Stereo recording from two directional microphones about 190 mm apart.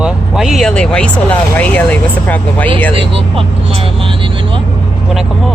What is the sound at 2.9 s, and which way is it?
Speech, 30° right (ahead or behind).